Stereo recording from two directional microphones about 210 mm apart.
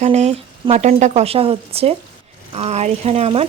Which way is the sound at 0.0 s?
30° right (ahead or behind).